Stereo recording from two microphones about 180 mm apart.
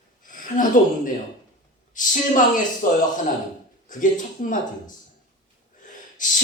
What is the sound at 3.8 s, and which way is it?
Speech, 45° left (ahead or behind).